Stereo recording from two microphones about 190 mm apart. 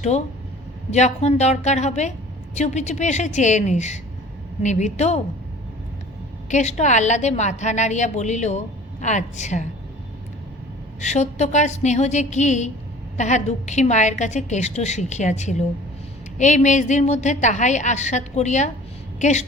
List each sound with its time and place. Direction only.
0.1 s a woman's voice: 35° left (ahead or behind)
6.5 s a woman's voice: 35° left (ahead or behind)
11.0 s a woman's voice: 35° left (ahead or behind)